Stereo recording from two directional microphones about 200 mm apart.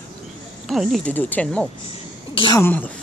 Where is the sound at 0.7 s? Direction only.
Centre (ahead or behind).